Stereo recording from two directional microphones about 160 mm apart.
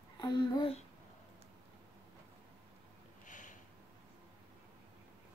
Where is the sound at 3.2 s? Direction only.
50° left (ahead or behind).